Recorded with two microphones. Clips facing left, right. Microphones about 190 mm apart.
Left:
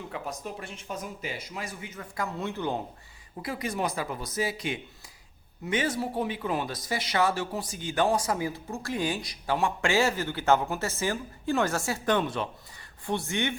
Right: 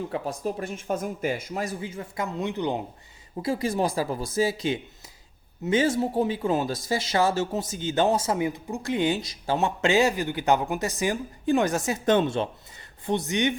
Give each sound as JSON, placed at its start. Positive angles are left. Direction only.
{"t": 0.1, "sound": "speech", "side_deg": -35}
{"t": 1.8, "sound": "speech", "side_deg": -30}
{"t": 3.4, "sound": "speech", "side_deg": -30}